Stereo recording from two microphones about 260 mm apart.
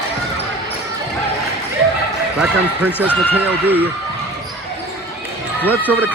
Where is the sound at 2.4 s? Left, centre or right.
Centre.